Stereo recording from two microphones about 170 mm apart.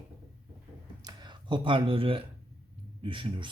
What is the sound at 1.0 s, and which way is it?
Speech, 25° right (ahead or behind).